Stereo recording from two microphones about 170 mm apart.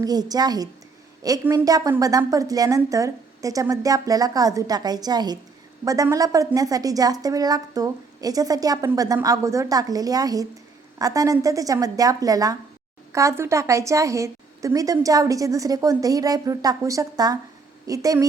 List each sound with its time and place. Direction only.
0.0 s a woman's voice: 20° right (ahead or behind)